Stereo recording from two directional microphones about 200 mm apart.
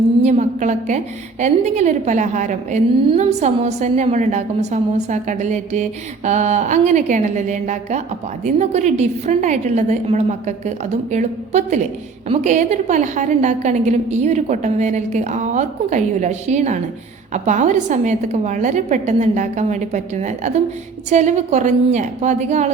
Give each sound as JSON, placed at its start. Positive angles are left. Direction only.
{"t": 0.2, "sound": "a woman's voice", "side_deg": -35}